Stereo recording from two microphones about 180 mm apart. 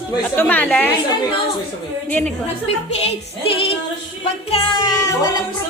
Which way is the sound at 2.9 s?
35° left (ahead or behind).